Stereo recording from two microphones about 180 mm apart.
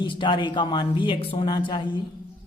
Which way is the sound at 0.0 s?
25° left (ahead or behind).